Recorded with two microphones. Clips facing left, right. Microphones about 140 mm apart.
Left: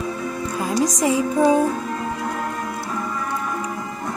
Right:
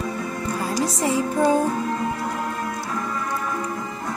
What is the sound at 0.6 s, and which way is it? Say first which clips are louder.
Music: left 4 dB; 15° left (ahead or behind).